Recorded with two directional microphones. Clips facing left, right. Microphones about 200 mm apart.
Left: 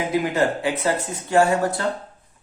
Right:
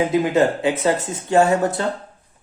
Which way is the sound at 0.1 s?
20° right (ahead or behind).